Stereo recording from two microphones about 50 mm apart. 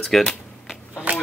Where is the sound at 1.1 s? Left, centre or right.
Right.